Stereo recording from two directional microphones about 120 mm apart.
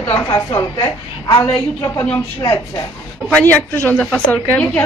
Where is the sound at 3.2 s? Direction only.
10° left (ahead or behind).